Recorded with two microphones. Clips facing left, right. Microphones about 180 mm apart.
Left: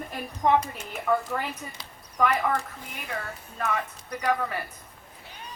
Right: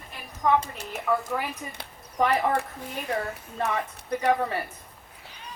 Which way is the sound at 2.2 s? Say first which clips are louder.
Right 1 dB; 30° right (ahead or behind).